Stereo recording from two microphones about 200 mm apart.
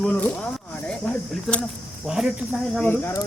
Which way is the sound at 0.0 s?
5° left (ahead or behind).